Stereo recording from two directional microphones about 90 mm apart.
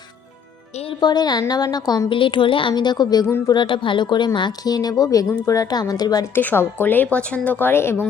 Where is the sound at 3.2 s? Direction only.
30° left (ahead or behind).